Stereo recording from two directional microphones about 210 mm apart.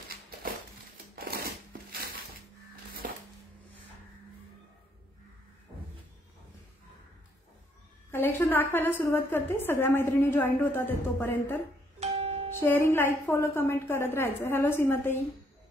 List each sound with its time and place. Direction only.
1.1 s a sound: 45° right (ahead or behind)
8.1 s a woman's voice: 10° left (ahead or behind)
12.0 s music: 30° right (ahead or behind)
12.5 s a woman's voice: 10° left (ahead or behind)